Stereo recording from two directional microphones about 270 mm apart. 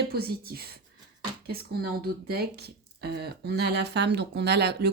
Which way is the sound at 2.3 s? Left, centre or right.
Right.